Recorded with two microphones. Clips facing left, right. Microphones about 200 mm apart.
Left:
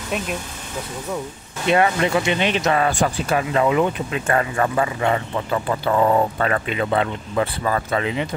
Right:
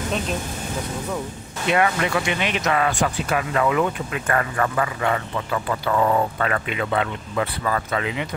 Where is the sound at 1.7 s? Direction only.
30° left (ahead or behind).